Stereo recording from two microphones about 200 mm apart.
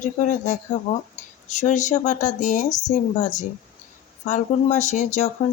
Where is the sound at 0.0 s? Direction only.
40° left (ahead or behind).